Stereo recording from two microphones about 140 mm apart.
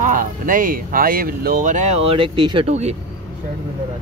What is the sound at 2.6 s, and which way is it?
Speech, 50° right (ahead or behind).